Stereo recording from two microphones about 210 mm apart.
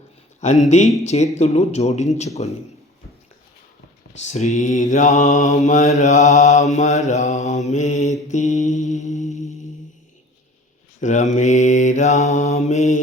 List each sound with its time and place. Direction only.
0.4 s mantra: 35° left (ahead or behind)
4.3 s mantra: 35° left (ahead or behind)
8.3 s music: 35° left (ahead or behind)
11.0 s mantra: 35° left (ahead or behind)